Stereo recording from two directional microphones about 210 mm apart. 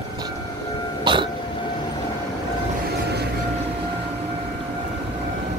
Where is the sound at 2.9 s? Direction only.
50° right (ahead or behind).